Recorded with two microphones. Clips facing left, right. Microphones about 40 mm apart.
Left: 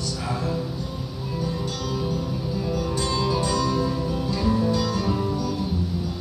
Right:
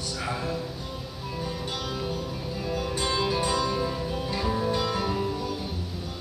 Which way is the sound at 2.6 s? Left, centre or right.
Right.